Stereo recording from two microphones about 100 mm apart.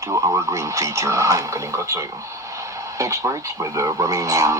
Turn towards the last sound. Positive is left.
turn(degrees=-30)  # may be behind; listen again after turning